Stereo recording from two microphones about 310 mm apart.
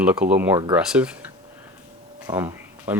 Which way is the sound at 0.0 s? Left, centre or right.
Centre.